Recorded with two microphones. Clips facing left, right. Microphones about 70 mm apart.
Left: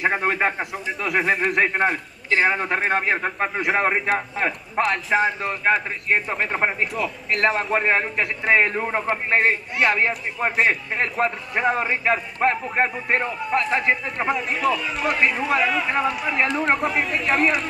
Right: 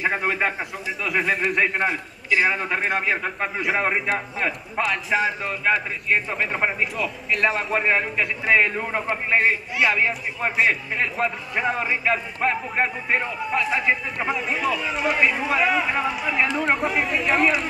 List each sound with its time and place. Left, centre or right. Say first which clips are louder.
0.0 s a man's voice: left 2 dB; centre
5.6 s a man's voice: left 1 dB; centre